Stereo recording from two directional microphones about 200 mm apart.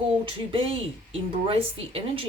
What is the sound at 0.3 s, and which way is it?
Speech, 30° right (ahead or behind).